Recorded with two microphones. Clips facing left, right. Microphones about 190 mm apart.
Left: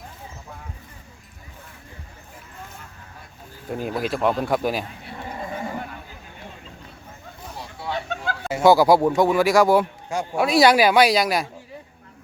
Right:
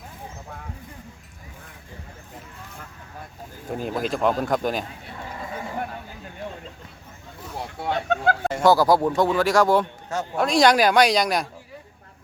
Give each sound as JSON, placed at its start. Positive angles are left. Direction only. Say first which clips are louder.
{"t": 3.7, "sound": "speech", "louder": "left 1 dB", "side_deg": 5}
{"t": 7.6, "sound": "a sound", "louder": "right 3 dB", "side_deg": -55}
{"t": 8.4, "sound": "speech", "louder": "left 3 dB", "side_deg": 10}